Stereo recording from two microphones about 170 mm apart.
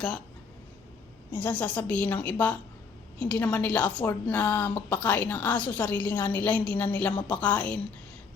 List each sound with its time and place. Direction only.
1.3 s a woman's voice: 10° left (ahead or behind)